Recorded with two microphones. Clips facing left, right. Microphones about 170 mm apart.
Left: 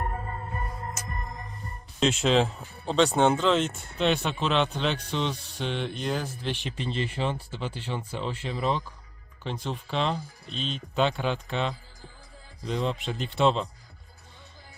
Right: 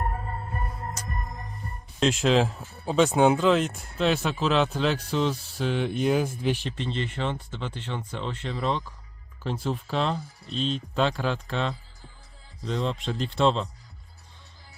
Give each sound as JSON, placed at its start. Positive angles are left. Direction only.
{"t": 2.0, "sound": "speech", "side_deg": 0}
{"t": 6.7, "sound": "speech", "side_deg": 10}